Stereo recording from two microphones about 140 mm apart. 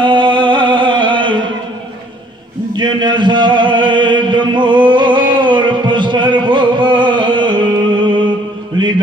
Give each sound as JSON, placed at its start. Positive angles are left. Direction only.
{"t": 0.0, "sound": "music", "side_deg": -35}
{"t": 2.7, "sound": "mantra", "side_deg": -35}